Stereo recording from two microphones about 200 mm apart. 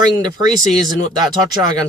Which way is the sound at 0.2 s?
20° right (ahead or behind).